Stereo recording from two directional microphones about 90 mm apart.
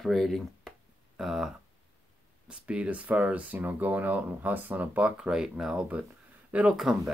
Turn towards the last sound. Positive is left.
turn(degrees=-5)  # may be behind; listen again after turning